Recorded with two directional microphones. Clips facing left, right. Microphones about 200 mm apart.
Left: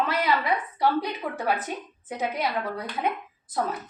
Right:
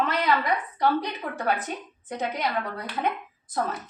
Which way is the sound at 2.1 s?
10° left (ahead or behind).